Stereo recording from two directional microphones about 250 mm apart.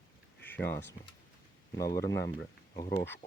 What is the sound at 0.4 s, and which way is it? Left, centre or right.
Speech, centre.